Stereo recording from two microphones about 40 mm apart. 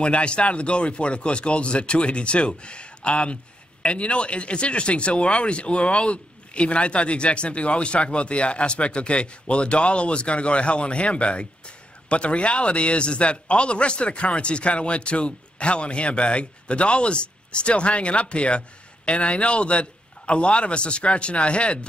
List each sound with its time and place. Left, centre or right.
0.0 s speech: left